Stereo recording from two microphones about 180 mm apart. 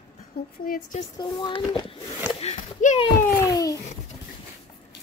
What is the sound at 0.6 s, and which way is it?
Speech, 50° left (ahead or behind).